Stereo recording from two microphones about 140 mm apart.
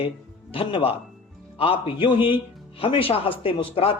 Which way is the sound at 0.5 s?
40° left (ahead or behind).